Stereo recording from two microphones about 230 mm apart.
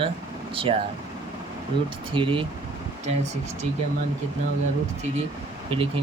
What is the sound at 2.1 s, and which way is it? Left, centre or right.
Speech, right.